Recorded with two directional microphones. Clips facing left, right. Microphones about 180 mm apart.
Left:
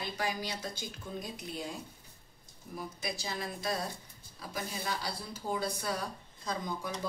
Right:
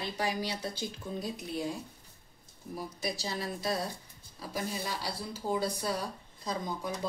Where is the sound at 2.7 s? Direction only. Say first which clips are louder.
Right 3 dB; 35° right (ahead or behind).